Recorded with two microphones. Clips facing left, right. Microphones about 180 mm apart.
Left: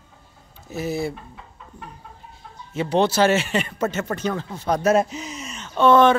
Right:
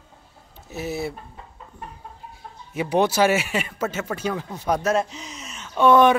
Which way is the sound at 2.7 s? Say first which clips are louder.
Left 1 dB; 10° right (ahead or behind).